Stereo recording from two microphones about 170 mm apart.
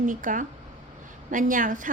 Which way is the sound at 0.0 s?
50° right (ahead or behind).